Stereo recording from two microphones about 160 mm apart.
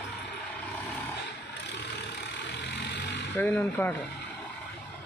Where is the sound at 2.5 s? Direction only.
90° left.